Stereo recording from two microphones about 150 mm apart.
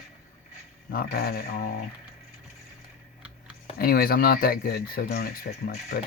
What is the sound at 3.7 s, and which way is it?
Speech, 85° left.